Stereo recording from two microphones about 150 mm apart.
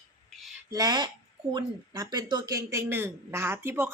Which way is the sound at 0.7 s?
25° right (ahead or behind).